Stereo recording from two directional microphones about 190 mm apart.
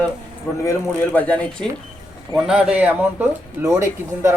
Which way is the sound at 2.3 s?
5° right (ahead or behind).